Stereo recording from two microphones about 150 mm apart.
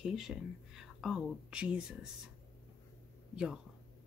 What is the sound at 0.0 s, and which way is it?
Speech, 5° right (ahead or behind).